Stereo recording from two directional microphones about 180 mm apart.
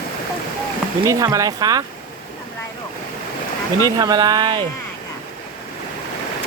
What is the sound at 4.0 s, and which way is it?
Speech, 20° right (ahead or behind).